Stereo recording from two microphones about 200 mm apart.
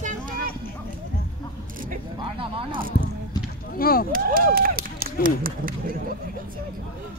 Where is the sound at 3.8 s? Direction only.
50° left (ahead or behind).